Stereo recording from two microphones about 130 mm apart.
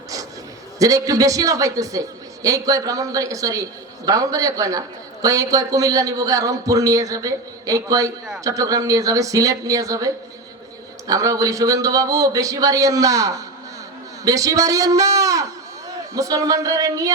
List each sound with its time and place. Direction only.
0.8 s a man's voice: 25° right (ahead or behind)